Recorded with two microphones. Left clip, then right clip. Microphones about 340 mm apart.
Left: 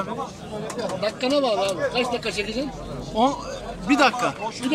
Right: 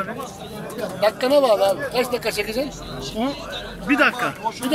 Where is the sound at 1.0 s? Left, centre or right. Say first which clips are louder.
Right 6 dB; right.